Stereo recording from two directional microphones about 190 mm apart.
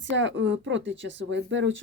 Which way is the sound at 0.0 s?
75° right (ahead or behind).